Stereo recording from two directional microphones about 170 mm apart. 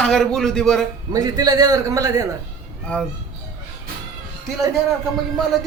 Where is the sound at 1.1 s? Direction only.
20° right (ahead or behind).